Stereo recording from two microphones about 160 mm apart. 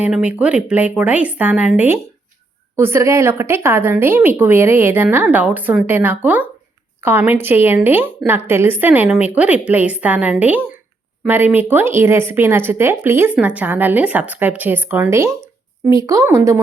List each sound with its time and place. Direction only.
0.0 s speech: 5° right (ahead or behind)